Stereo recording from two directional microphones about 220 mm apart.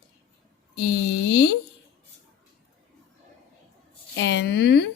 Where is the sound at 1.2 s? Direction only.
50° left (ahead or behind).